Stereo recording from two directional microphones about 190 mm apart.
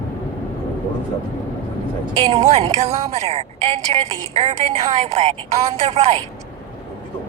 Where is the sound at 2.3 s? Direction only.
35° right (ahead or behind).